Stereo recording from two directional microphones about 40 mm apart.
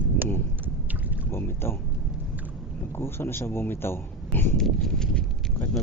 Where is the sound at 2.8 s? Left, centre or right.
Left.